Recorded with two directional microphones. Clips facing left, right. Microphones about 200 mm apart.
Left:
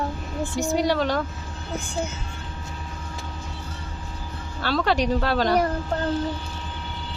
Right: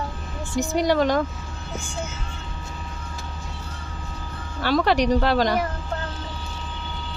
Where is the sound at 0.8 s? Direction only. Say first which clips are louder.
Right 5 dB; 10° right (ahead or behind).